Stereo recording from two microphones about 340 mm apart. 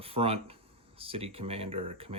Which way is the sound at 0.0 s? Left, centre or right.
Centre.